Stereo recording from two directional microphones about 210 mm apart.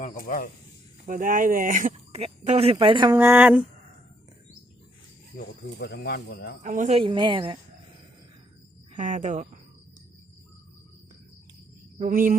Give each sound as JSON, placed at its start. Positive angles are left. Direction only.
{"t": 0.0, "sound": "speech", "side_deg": 40}
{"t": 1.0, "sound": "speech", "side_deg": -40}
{"t": 3.2, "sound": "speech", "side_deg": -10}
{"t": 5.4, "sound": "speech", "side_deg": 50}
{"t": 6.6, "sound": "speech", "side_deg": -35}
{"t": 9.0, "sound": "speech", "side_deg": -35}
{"t": 11.9, "sound": "speech", "side_deg": -40}